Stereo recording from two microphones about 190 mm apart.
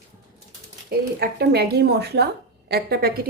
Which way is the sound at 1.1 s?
55° right (ahead or behind).